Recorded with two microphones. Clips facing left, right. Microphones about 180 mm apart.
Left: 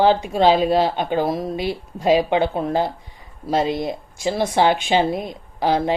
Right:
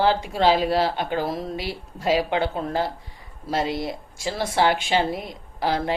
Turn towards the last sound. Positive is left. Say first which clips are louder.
# left 5 dB
turn(degrees=20)  # may be behind; listen again after turning